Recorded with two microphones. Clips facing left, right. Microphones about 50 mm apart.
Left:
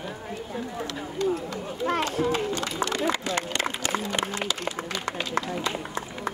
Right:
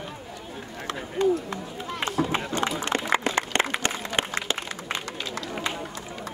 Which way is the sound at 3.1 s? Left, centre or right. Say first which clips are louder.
Right 4 dB; right.